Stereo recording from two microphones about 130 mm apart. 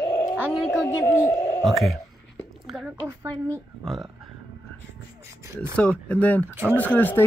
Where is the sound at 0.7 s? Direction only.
25° left (ahead or behind).